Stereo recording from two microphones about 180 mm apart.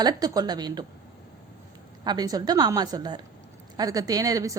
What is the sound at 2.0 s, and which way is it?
A woman's voice, 20° right (ahead or behind).